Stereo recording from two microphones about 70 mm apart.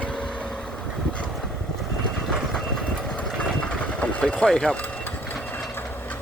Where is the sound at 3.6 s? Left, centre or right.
Centre.